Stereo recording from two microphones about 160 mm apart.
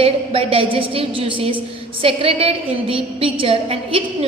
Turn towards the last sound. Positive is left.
turn(degrees=-35)  # may be behind; listen again after turning